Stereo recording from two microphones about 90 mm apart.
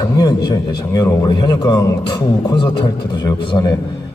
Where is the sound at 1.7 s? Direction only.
35° left (ahead or behind).